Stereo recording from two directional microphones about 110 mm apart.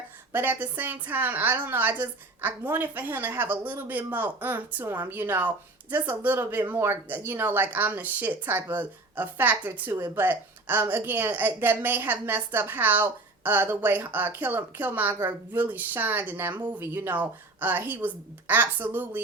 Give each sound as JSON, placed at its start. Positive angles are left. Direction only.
{"t": 0.3, "sound": "a woman's voice", "side_deg": -20}